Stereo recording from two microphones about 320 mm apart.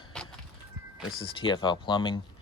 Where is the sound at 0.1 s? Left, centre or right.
Centre.